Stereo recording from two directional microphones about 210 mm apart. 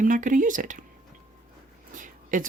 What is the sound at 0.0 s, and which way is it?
Speech, 40° right (ahead or behind).